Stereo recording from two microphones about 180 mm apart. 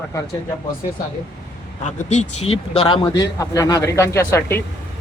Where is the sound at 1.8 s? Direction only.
40° left (ahead or behind).